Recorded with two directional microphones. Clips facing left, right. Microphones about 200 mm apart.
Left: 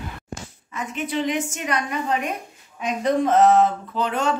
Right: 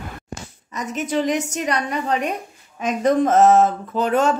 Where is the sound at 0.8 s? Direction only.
45° right (ahead or behind).